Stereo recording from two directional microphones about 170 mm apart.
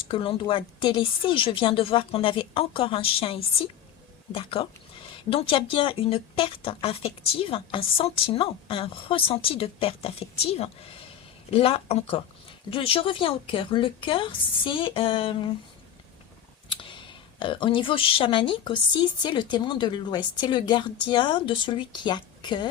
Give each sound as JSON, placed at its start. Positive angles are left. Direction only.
{"t": 0.1, "sound": "speech", "side_deg": 30}
{"t": 16.6, "sound": "clicking", "side_deg": 30}
{"t": 17.4, "sound": "a woman's voice", "side_deg": 30}